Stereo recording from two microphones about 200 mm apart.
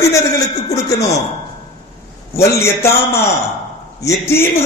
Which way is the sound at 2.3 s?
10° left (ahead or behind).